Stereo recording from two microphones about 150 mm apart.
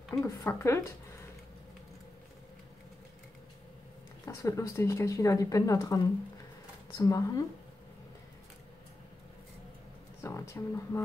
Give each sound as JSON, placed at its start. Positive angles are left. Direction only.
{"t": 0.2, "sound": "speech", "side_deg": 15}
{"t": 4.4, "sound": "speech", "side_deg": 20}
{"t": 7.0, "sound": "speech", "side_deg": 20}
{"t": 10.2, "sound": "speech", "side_deg": 20}